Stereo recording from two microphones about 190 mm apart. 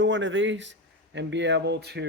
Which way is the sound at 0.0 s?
75° right (ahead or behind).